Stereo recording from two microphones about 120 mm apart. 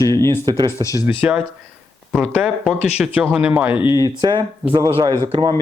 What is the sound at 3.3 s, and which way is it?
Speech, 10° right (ahead or behind).